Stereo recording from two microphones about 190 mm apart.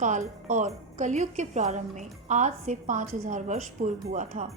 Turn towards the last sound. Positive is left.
turn(degrees=-40)  # may be behind; listen again after turning